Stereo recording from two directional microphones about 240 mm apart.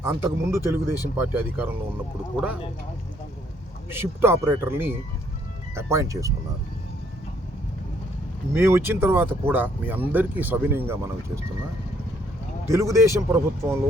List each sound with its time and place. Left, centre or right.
0.0 s speech: centre
3.8 s speech: centre
8.5 s speech: centre
12.6 s speech: centre